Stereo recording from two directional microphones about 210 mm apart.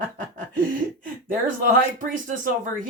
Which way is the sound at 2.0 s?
40° right (ahead or behind).